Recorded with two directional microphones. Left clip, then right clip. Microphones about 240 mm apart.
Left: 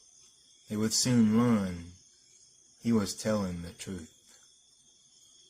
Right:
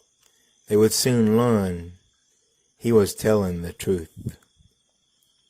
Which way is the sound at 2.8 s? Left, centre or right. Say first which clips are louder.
Right 12 dB; right.